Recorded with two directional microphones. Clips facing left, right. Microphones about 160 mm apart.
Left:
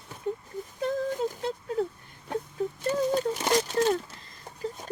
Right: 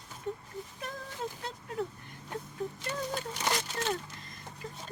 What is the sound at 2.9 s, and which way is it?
Speech, 35° left (ahead or behind).